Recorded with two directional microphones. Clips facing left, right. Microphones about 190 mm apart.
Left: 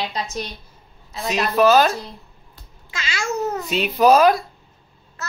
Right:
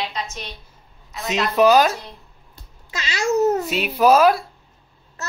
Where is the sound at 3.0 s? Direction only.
35° right (ahead or behind).